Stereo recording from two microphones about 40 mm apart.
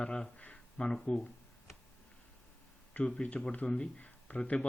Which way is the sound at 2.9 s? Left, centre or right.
Left.